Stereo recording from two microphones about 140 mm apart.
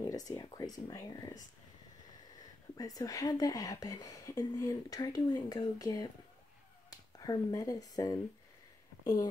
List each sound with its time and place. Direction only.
0.1 s speech: 25° left (ahead or behind)
2.8 s speech: 25° left (ahead or behind)